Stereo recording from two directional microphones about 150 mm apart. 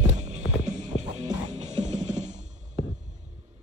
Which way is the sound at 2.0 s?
50° right (ahead or behind).